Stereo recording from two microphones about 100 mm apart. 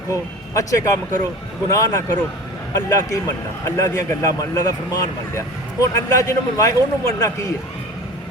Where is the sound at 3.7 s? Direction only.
30° left (ahead or behind).